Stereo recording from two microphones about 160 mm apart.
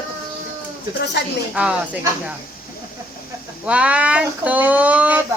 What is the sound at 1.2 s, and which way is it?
Speech, 90° left.